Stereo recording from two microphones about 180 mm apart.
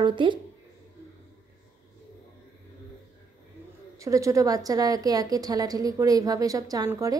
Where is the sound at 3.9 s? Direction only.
15° right (ahead or behind).